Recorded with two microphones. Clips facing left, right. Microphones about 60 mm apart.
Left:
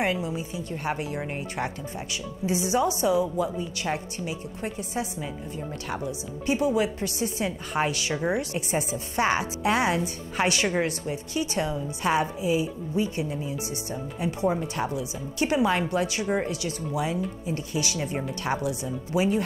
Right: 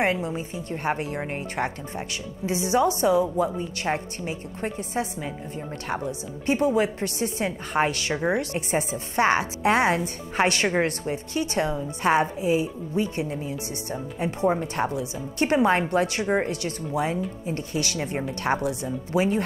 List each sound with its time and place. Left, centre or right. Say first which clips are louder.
0.0 s speech: right 2 dB; right
8.1 s a woman's voice: right 2 dB; right
8.4 s speech: right 2 dB; right